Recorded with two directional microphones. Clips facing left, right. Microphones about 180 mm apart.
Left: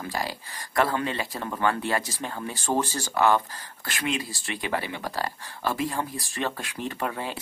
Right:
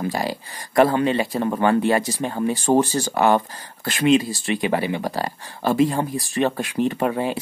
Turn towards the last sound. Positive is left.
turn(degrees=-20)  # may be behind; listen again after turning